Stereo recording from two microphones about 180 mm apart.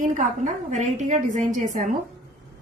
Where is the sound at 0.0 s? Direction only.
45° right (ahead or behind).